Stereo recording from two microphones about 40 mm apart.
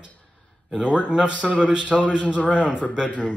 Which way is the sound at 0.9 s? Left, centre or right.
Right.